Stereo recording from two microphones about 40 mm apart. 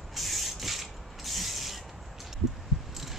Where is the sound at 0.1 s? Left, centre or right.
Centre.